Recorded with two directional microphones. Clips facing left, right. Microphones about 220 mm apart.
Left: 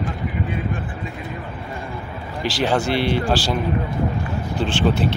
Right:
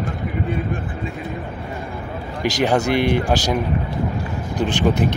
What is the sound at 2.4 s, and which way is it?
Speech, 15° right (ahead or behind).